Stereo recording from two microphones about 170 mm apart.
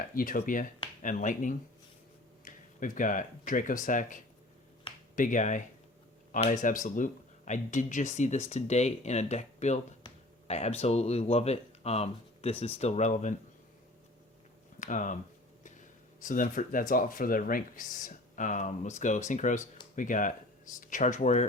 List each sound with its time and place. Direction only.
0.2 s speech: 55° left (ahead or behind)
14.8 s speech: 45° left (ahead or behind)
16.2 s speech: 50° left (ahead or behind)